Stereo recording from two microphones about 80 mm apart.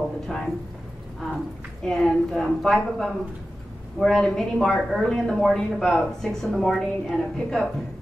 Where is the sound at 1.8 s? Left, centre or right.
Centre.